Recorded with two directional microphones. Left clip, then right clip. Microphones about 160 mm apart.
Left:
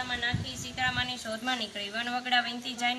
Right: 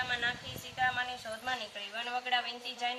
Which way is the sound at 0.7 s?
35° right (ahead or behind).